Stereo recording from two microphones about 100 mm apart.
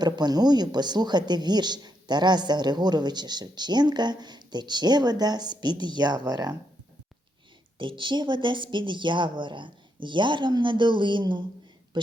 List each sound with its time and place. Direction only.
0.0 s speech: 45° right (ahead or behind)
7.8 s speech: 55° right (ahead or behind)